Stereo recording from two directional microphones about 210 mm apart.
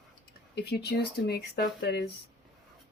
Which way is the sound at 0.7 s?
50° left (ahead or behind).